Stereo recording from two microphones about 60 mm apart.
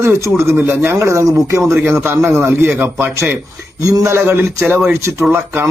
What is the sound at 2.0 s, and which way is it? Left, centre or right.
Speech, right.